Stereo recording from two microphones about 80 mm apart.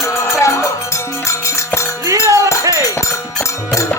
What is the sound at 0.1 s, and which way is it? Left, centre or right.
Music, left.